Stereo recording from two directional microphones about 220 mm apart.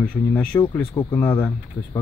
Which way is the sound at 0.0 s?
5° left (ahead or behind).